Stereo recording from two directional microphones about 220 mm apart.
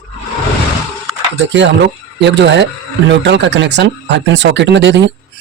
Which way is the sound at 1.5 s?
55° right (ahead or behind).